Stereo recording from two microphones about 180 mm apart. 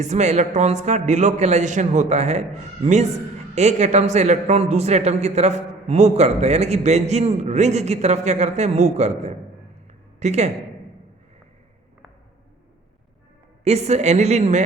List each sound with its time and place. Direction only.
0.0 s a man's voice: 40° right (ahead or behind)
13.7 s speech: 35° right (ahead or behind)